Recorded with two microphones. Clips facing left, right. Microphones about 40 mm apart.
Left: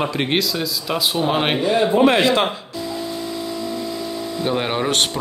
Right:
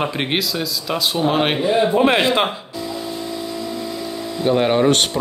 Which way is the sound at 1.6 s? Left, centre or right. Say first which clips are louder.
Left 2 dB; centre.